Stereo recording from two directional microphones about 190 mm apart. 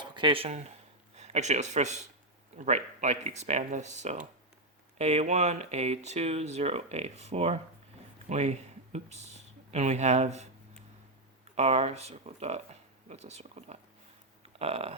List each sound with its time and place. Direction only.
0.0 s speech: 25° right (ahead or behind)
11.5 s speech: 35° right (ahead or behind)
14.4 s a sound: 30° right (ahead or behind)